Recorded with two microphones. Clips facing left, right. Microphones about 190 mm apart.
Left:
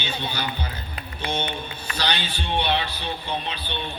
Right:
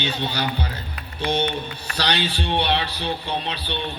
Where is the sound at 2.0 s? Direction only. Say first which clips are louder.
Right 4 dB; 65° right (ahead or behind).